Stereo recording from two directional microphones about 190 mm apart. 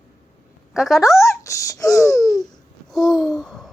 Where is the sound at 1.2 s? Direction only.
15° left (ahead or behind).